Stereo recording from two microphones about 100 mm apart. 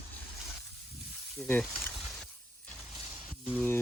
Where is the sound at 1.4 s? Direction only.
5° left (ahead or behind).